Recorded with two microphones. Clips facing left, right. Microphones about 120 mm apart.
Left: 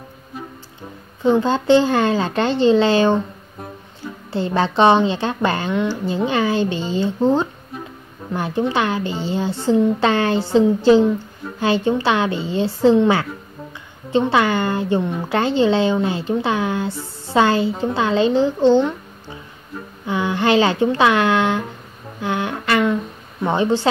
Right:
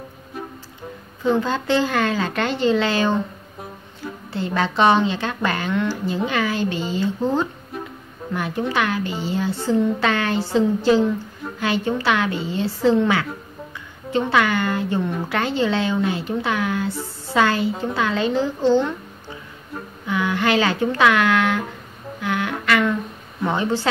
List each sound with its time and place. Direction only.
1.2 s speech: 25° left (ahead or behind)
4.3 s speech: 30° left (ahead or behind)
20.1 s speech: 25° left (ahead or behind)
22.2 s humming: 25° left (ahead or behind)
23.4 s speech: 25° left (ahead or behind)